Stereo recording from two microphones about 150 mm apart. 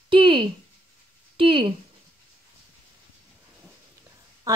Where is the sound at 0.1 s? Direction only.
35° right (ahead or behind).